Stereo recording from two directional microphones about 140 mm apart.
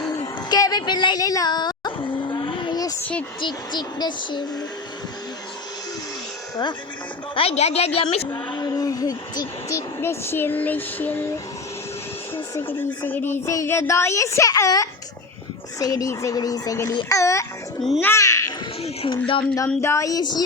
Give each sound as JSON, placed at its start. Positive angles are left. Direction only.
{"t": 0.5, "sound": "a sound", "side_deg": 30}
{"t": 3.0, "sound": "speech", "side_deg": 10}
{"t": 3.4, "sound": "speech", "side_deg": 30}
{"t": 7.3, "sound": "a woman's voice", "side_deg": 45}
{"t": 8.0, "sound": "speech", "side_deg": 35}
{"t": 12.5, "sound": "a child's voice", "side_deg": 15}
{"t": 18.8, "sound": "a sound", "side_deg": 40}
{"t": 19.5, "sound": "speech", "side_deg": 20}